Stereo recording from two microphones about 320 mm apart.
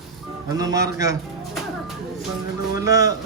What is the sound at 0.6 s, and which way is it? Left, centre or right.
Speech, centre.